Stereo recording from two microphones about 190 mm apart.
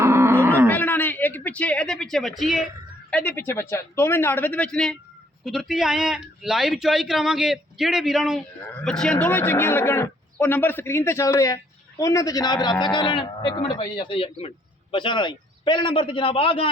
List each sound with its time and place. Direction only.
0.0 s wild animals: 15° right (ahead or behind)
0.7 s a man's voice: 10° left (ahead or behind); by 16.6 s 30° left (ahead or behind)